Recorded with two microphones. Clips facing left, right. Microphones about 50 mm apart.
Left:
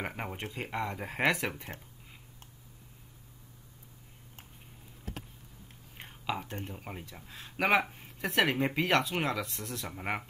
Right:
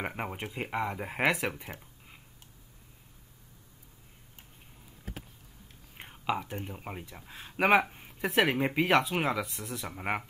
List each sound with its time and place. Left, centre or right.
0.0 s speech: centre
1.6 s a sound: centre
5.9 s speech: centre